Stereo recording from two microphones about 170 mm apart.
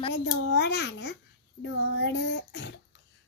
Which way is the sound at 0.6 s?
85° left.